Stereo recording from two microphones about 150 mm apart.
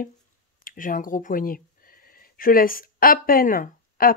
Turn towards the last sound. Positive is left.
turn(degrees=70)  # may be behind; listen again after turning